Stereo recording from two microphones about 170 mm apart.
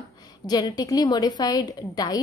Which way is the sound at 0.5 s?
25° left (ahead or behind).